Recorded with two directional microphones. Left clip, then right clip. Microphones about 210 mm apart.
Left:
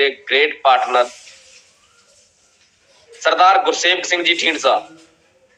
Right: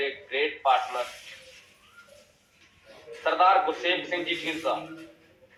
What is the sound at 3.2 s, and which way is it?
A man's voice, 45° left (ahead or behind).